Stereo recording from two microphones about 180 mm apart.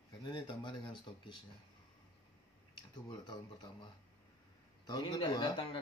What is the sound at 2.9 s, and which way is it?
Speech, 25° left (ahead or behind).